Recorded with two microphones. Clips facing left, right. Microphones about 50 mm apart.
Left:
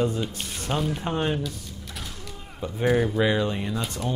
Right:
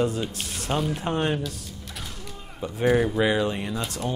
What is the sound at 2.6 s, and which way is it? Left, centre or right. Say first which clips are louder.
Speech: right 1 dB; centre.